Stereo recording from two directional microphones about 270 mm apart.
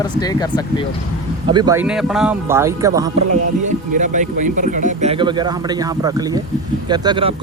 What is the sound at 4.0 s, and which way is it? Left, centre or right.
Speech, right.